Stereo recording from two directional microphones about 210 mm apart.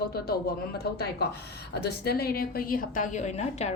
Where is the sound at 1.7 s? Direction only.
50° left (ahead or behind); by 3.8 s 30° left (ahead or behind).